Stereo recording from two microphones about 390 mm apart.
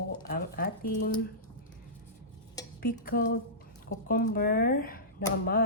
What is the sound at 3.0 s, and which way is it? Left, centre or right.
A woman's voice, left.